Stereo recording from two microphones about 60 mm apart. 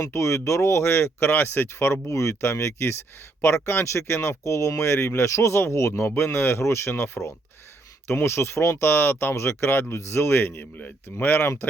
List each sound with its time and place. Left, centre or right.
0.0 s speech: left
10.8 s speech: left
11.3 s speech: left